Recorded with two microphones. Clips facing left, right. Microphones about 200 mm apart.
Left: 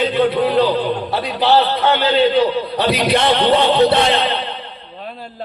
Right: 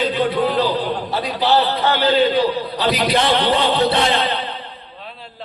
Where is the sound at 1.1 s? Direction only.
55° left (ahead or behind).